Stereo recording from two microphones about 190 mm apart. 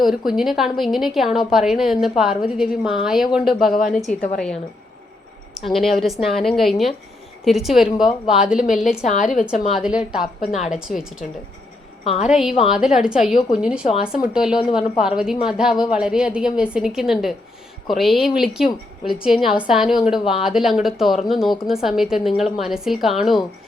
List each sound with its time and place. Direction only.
0.0 s a woman's voice: centre (ahead or behind)
3.7 s a woman's voice: 45° left (ahead or behind)
5.7 s a woman's voice: centre (ahead or behind)
9.0 s a woman's voice: 40° left (ahead or behind)
9.7 s a woman's voice: 5° right (ahead or behind)
12.0 s a woman's voice: 30° left (ahead or behind)
12.3 s a woman's voice: 5° right (ahead or behind)